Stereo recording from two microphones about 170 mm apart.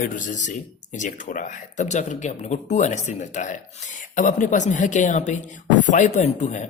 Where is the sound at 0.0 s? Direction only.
50° left (ahead or behind).